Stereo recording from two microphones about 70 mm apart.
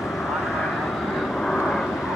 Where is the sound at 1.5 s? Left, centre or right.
Centre.